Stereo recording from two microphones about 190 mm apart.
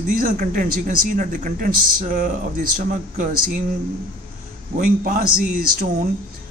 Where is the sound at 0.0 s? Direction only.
45° right (ahead or behind).